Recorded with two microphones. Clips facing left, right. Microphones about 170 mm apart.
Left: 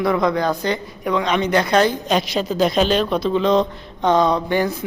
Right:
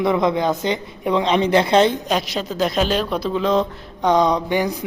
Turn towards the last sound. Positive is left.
turn(degrees=-15)  # may be behind; listen again after turning